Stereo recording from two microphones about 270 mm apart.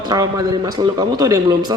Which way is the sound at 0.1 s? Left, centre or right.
Centre.